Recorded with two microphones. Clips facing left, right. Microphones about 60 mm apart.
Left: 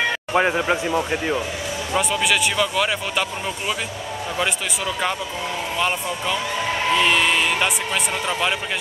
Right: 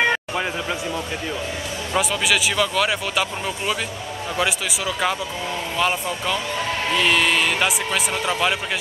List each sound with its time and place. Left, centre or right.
0.3 s speech: left
2.0 s a man's voice: centre